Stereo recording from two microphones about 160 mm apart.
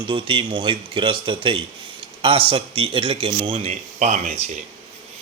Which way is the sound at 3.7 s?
45° right (ahead or behind).